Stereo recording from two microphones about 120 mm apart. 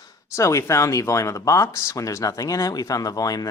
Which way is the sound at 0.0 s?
25° left (ahead or behind).